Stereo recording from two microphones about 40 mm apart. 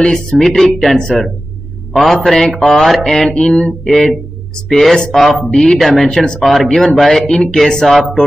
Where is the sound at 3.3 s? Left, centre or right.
Left.